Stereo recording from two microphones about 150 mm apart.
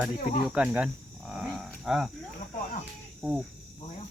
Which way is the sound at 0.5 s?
10° right (ahead or behind).